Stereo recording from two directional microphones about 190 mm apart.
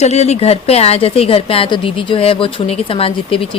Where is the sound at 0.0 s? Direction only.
35° left (ahead or behind).